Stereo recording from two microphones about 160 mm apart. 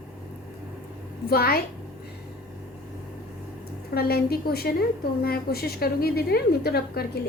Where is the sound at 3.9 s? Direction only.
75° left (ahead or behind).